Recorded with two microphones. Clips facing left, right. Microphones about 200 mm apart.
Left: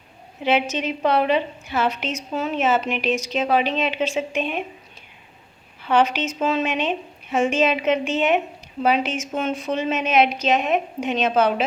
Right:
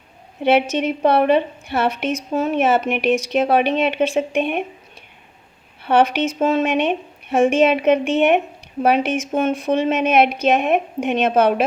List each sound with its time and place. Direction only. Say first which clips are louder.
0.4 s a woman's voice: right 5 dB; 60° right (ahead or behind)
5.9 s a woman's voice: right 3 dB; 60° right (ahead or behind)